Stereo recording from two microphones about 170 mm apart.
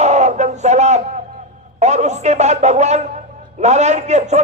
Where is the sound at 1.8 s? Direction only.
40° right (ahead or behind).